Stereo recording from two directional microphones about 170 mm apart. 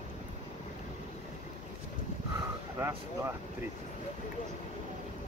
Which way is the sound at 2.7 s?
15° right (ahead or behind).